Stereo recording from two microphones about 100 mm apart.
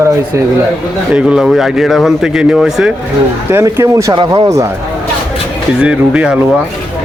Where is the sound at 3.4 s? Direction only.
25° right (ahead or behind).